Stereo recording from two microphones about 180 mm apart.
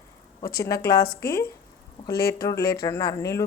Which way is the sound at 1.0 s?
60° left (ahead or behind).